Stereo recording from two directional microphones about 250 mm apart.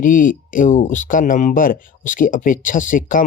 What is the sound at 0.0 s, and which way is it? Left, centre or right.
Speech, left.